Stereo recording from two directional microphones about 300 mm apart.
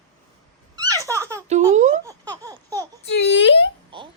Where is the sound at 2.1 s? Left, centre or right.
Centre.